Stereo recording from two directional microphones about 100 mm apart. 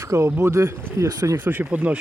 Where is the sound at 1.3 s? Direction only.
20° right (ahead or behind).